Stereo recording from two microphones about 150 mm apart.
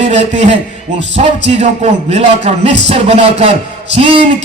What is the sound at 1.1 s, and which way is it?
Music, 45° right (ahead or behind).